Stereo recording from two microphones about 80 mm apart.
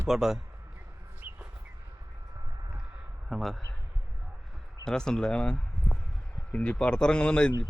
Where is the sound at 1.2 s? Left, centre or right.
Right.